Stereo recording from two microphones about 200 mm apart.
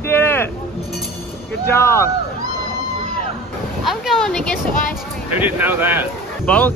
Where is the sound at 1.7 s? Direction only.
15° left (ahead or behind).